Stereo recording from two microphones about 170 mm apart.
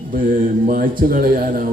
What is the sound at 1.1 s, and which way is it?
Speech, 55° right (ahead or behind).